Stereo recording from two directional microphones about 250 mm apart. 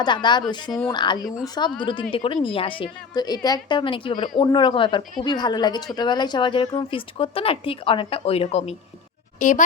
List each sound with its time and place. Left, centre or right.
0.0 s speech: centre